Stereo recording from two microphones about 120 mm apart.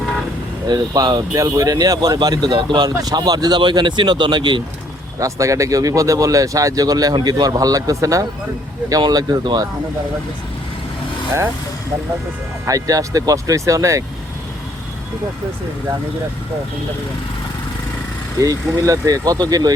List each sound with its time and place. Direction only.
0.7 s speech: 35° right (ahead or behind)
5.2 s speech: 25° right (ahead or behind)
12.6 s speech: 30° right (ahead or behind)
18.3 s speech: 30° right (ahead or behind)